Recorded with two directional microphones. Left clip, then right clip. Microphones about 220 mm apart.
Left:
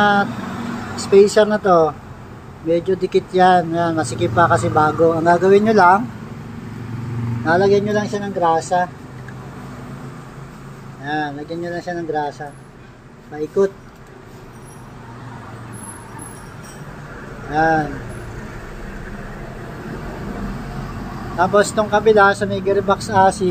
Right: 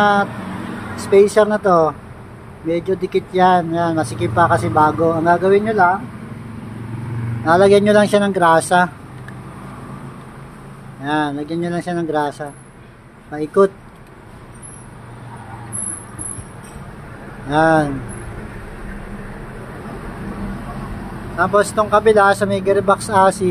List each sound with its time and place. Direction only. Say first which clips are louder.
0.0 s speech: right 1 dB; centre (ahead or behind)
7.4 s speech: right 4 dB; 15° right (ahead or behind)
11.1 s speech: right 3 dB; 15° right (ahead or behind)
17.5 s speech: right 3 dB; 20° right (ahead or behind)
21.4 s speech: even; centre (ahead or behind)